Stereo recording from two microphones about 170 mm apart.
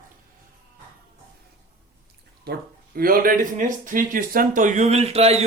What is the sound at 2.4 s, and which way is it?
Speech, 65° right (ahead or behind).